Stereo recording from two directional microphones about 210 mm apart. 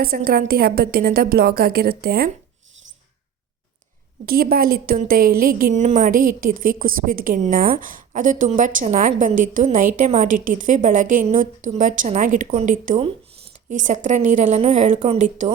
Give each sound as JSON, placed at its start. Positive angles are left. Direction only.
{"t": 0.0, "sound": "a woman's voice", "side_deg": -45}
{"t": 4.3, "sound": "a woman's voice", "side_deg": -45}